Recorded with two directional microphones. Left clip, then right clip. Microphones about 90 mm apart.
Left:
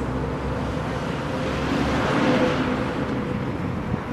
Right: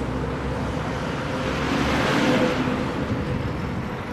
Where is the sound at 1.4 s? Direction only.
25° right (ahead or behind).